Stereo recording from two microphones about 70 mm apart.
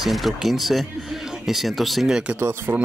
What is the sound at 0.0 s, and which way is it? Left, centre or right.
Speech, centre.